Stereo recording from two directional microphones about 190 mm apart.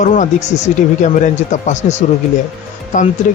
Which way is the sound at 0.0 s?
40° left (ahead or behind).